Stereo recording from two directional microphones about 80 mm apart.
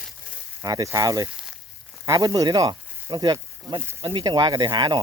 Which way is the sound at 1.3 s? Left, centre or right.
Centre.